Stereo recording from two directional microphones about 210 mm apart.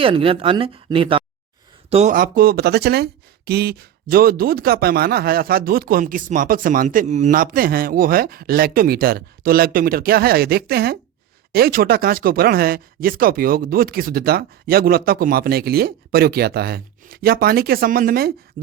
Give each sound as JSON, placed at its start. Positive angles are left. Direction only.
{"t": 0.0, "sound": "speech", "side_deg": -25}
{"t": 18.6, "sound": "hoot", "side_deg": -40}